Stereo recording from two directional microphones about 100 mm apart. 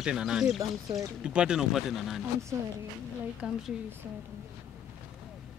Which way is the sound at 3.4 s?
10° right (ahead or behind).